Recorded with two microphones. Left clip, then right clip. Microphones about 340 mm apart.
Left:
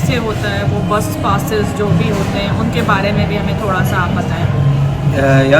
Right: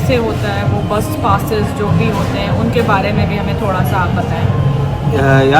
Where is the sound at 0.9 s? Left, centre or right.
Centre.